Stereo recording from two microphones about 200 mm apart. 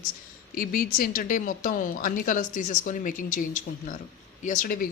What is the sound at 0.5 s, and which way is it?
Speech, 45° left (ahead or behind).